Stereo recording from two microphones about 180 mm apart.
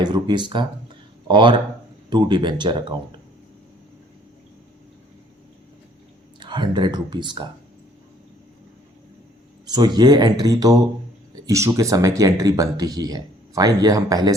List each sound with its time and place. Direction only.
0.0 s speech: 25° right (ahead or behind)
6.4 s speech: 25° right (ahead or behind)
9.6 s speech: 20° right (ahead or behind)